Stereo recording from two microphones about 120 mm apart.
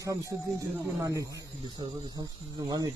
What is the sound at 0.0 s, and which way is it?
Speech, 25° right (ahead or behind).